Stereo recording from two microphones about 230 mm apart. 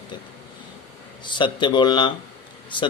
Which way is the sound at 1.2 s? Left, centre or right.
Left.